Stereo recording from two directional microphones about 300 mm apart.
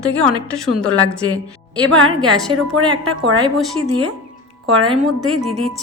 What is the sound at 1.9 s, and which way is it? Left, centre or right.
Speech, right.